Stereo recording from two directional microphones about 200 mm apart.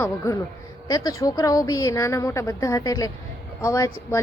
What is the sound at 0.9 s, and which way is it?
A woman's voice, 20° left (ahead or behind).